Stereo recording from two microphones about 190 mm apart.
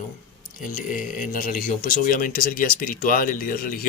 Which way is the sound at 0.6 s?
45° left (ahead or behind).